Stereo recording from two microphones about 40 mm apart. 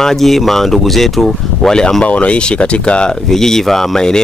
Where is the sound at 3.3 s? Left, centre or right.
Centre.